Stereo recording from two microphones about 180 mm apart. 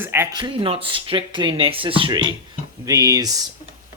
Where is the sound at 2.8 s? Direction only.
20° right (ahead or behind).